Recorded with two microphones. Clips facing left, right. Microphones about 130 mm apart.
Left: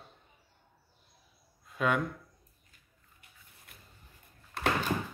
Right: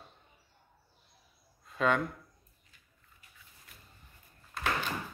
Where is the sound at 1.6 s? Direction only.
5° left (ahead or behind).